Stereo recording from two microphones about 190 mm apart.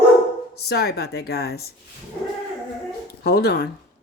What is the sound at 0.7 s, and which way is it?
Speech, 60° left (ahead or behind).